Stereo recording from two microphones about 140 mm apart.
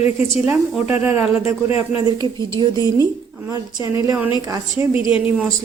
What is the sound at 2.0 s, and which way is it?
A woman's voice, 30° right (ahead or behind).